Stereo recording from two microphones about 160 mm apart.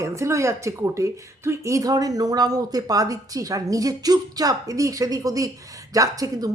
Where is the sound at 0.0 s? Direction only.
20° right (ahead or behind).